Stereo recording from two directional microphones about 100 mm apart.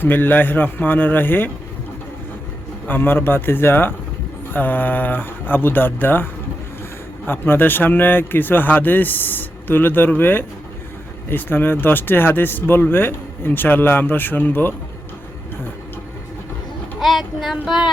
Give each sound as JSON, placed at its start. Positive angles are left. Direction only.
{"t": 0.0, "sound": "speech", "side_deg": 20}
{"t": 2.8, "sound": "speech", "side_deg": 20}
{"t": 7.3, "sound": "speech", "side_deg": 20}
{"t": 17.0, "sound": "child singing", "side_deg": 0}